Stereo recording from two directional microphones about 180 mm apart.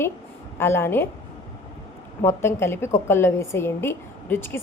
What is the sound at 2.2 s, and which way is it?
A woman's voice, 15° left (ahead or behind).